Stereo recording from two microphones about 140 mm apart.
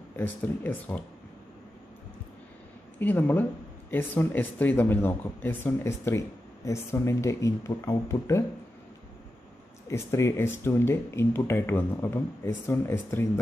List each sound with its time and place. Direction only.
0.1 s speech: 15° left (ahead or behind)
3.0 s speech: 15° left (ahead or behind)
9.8 s speech: 20° left (ahead or behind)